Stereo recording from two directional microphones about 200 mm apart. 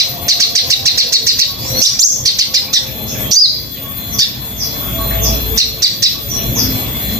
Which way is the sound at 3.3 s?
20° right (ahead or behind).